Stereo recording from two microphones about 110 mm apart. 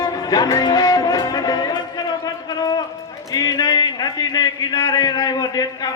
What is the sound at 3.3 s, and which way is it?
Music, 35° left (ahead or behind).